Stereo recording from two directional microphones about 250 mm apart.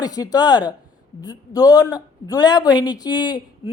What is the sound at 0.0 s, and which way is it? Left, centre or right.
Speech, centre.